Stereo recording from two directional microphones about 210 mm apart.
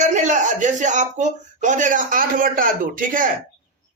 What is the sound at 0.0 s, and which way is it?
Speech, 35° right (ahead or behind).